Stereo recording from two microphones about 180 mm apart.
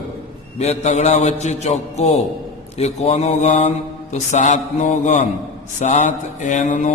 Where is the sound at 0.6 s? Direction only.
40° left (ahead or behind).